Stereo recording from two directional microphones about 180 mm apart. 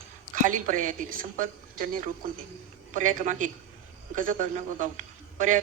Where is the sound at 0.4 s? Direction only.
45° right (ahead or behind).